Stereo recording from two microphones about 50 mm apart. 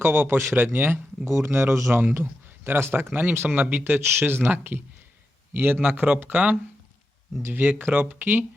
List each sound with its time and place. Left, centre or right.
0.0 s speech: right
0.5 s speech: right
2.6 s speech: right
3.1 s speech: right
5.8 s speech: right
6.3 s speech: right